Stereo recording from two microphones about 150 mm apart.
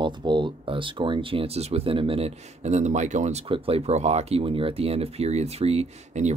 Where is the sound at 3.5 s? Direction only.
40° right (ahead or behind).